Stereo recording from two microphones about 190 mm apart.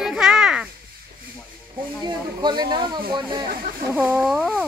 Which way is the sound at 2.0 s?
20° right (ahead or behind).